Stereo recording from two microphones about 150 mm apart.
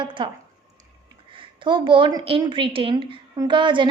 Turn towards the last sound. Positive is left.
turn(degrees=-30)  # may be behind; listen again after turning